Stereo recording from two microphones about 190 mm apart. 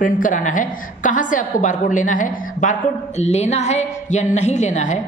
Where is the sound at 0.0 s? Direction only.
45° left (ahead or behind).